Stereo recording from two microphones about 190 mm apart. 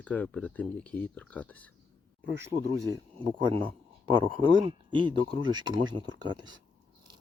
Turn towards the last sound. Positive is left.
turn(degrees=-25)  # may be behind; listen again after turning